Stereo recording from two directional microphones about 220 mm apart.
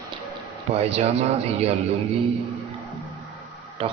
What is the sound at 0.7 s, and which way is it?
A man's voice, 30° right (ahead or behind).